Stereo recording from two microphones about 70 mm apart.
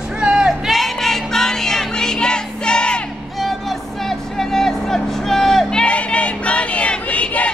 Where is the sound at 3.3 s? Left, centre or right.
Centre.